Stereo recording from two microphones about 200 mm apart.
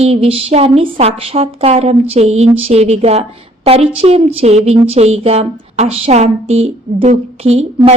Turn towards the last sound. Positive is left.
turn(degrees=-30)  # may be behind; listen again after turning